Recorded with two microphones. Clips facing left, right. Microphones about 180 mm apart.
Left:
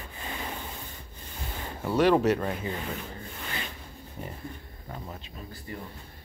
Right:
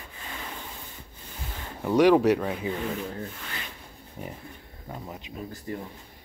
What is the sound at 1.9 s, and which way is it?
Speech, 15° right (ahead or behind).